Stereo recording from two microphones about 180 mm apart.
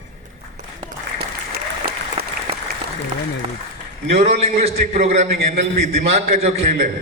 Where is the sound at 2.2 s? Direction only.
35° right (ahead or behind).